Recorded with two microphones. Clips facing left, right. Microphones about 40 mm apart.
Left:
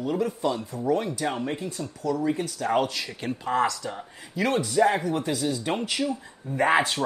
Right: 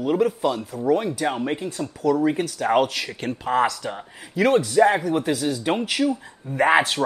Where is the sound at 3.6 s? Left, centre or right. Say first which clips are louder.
Right 3 dB; right.